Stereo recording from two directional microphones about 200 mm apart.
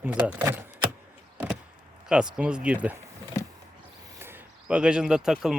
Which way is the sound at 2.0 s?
5° right (ahead or behind).